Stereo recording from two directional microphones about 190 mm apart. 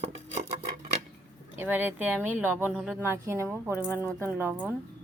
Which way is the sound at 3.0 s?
15° right (ahead or behind).